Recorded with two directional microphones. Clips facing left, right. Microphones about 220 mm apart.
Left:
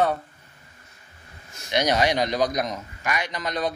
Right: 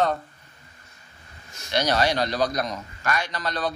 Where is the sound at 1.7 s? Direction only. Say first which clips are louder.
Left 1 dB; 15° left (ahead or behind).